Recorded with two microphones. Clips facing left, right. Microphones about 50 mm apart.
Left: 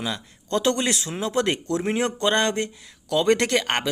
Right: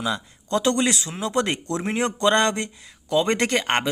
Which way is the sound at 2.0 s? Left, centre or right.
Centre.